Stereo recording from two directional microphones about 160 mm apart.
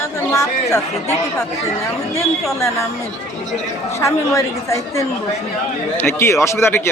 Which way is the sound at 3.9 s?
20° left (ahead or behind).